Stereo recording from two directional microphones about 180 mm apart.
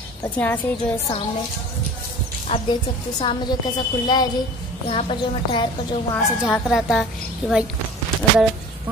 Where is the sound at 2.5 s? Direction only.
30° left (ahead or behind).